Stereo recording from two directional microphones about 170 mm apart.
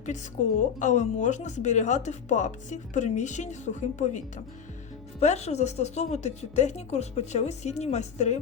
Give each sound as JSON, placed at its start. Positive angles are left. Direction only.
{"t": 0.8, "sound": "speech", "side_deg": 45}
{"t": 5.2, "sound": "speech", "side_deg": 40}